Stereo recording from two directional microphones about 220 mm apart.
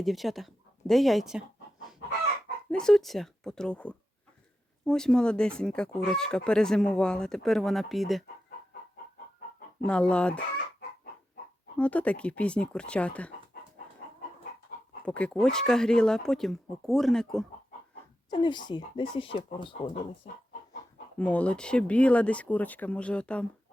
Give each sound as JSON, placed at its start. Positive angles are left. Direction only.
{"t": 0.0, "sound": "speech", "side_deg": 0}
{"t": 2.6, "sound": "speech", "side_deg": 5}
{"t": 9.8, "sound": "speech", "side_deg": 5}
{"t": 11.8, "sound": "speech", "side_deg": 5}
{"t": 15.0, "sound": "speech", "side_deg": 5}
{"t": 18.3, "sound": "speech", "side_deg": 20}
{"t": 19.9, "sound": "speech", "side_deg": 35}
{"t": 21.2, "sound": "speech", "side_deg": 5}